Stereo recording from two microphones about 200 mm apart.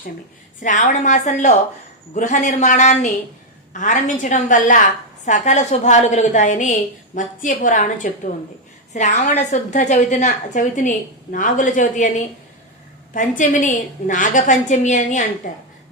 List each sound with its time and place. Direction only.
0.6 s a woman's voice: 40° left (ahead or behind)